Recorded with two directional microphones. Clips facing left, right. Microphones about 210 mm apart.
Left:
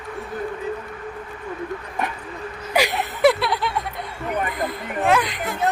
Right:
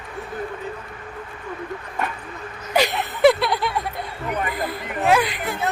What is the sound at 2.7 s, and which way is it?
Chuckle, 10° left (ahead or behind).